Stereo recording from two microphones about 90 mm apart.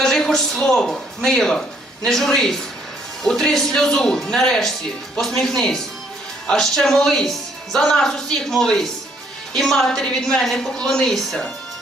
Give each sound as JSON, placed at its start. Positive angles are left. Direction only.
{"t": 0.0, "sound": "a man's voice", "side_deg": 5}